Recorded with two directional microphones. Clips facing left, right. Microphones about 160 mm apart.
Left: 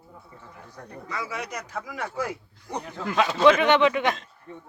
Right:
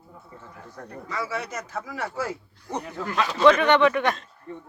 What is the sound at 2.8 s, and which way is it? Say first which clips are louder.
Speech: right 2 dB; 5° right (ahead or behind).